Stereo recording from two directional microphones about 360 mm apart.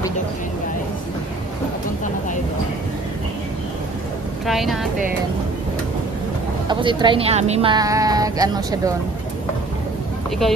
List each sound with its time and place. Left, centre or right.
4.5 s speech: centre
6.7 s speech: centre